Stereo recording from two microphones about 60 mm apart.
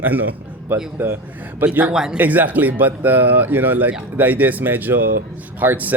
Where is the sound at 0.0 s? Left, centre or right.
Right.